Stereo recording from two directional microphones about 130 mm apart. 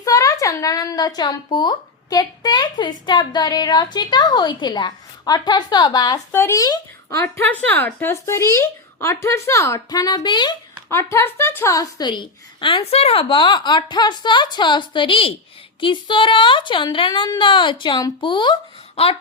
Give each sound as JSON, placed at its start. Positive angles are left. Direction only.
{"t": 0.0, "sound": "a woman's voice", "side_deg": 25}
{"t": 6.3, "sound": "speech", "side_deg": 20}
{"t": 10.8, "sound": "a woman's voice", "side_deg": 20}